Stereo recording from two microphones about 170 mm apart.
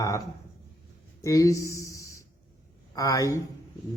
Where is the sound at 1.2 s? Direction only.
20° left (ahead or behind).